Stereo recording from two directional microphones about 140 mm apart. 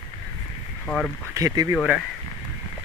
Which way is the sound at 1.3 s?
25° right (ahead or behind).